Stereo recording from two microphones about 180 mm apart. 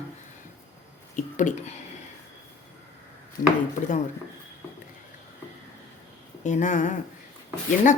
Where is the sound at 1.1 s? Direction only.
45° left (ahead or behind).